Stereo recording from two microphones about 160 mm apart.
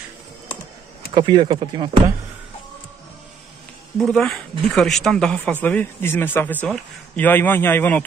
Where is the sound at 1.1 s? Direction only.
30° right (ahead or behind).